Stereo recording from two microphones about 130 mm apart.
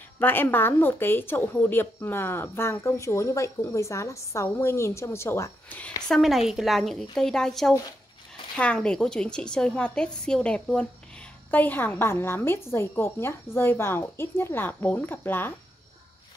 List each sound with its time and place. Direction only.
0.2 s a woman's voice: 15° left (ahead or behind)
6.0 s a woman's voice: centre (ahead or behind)